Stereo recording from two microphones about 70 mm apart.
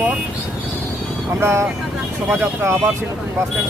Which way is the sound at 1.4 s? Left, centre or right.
Right.